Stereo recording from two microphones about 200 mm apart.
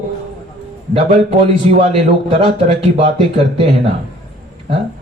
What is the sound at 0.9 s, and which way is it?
A man's voice, 30° right (ahead or behind).